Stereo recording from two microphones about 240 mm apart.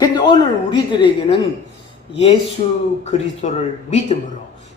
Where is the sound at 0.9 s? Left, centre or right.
Left.